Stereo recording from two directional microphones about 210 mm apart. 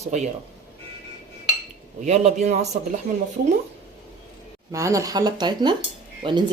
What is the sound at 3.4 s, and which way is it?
Speech, 45° right (ahead or behind).